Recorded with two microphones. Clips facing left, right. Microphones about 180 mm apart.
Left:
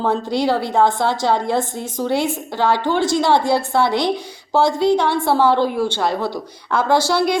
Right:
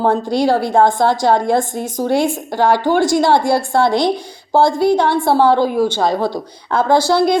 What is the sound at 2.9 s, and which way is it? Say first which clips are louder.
A woman's voice: right 3 dB; 10° right (ahead or behind).